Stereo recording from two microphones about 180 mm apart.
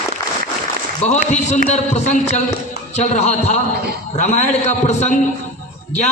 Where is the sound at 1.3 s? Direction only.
40° left (ahead or behind).